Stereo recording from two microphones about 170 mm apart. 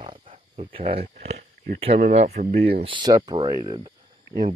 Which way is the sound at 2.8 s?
30° right (ahead or behind).